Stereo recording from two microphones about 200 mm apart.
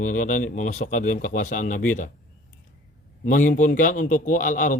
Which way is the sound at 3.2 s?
40° left (ahead or behind).